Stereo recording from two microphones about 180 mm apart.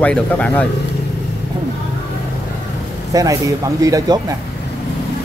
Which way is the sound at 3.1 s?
20° right (ahead or behind).